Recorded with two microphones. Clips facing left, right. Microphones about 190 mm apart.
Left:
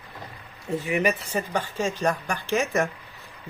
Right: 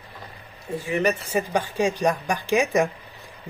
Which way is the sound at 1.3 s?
15° right (ahead or behind).